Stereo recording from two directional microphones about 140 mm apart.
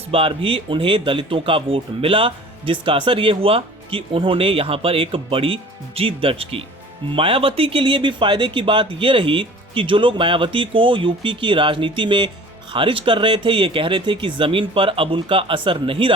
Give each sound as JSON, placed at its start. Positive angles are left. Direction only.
{"t": 0.1, "sound": "speech", "side_deg": -40}